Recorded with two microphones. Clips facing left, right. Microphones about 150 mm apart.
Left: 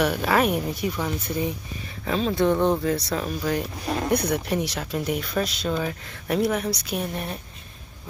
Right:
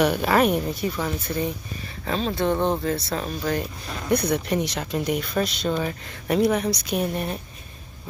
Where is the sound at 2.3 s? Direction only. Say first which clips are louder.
Left 2 dB; 20° right (ahead or behind).